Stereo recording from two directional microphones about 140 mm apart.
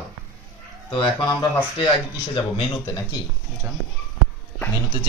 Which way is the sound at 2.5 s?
35° left (ahead or behind).